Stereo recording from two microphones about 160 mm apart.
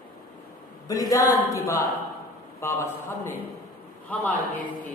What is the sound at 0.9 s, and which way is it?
A woman's voice, 20° left (ahead or behind).